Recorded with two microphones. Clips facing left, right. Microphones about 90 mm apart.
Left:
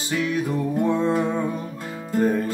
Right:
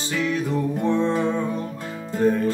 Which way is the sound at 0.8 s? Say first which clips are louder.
Right 1 dB; 10° left (ahead or behind).